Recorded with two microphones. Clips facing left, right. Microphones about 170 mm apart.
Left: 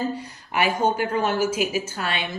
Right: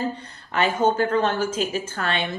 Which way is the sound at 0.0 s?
10° left (ahead or behind).